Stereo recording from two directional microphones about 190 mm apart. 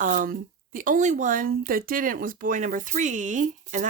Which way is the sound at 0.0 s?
45° right (ahead or behind).